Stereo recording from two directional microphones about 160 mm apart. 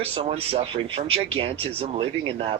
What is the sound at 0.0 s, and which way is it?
Speech, 40° right (ahead or behind).